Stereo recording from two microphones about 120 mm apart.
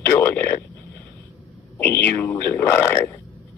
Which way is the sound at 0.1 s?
20° left (ahead or behind).